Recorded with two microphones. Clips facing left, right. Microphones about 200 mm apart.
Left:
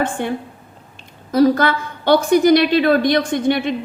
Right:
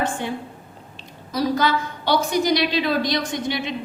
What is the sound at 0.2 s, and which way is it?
A woman's voice, 55° left (ahead or behind).